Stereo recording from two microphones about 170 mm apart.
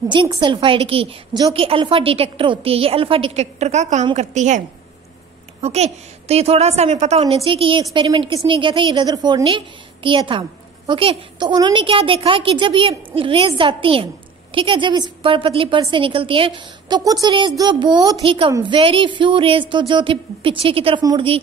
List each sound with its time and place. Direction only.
0.1 s a woman's voice: 30° right (ahead or behind)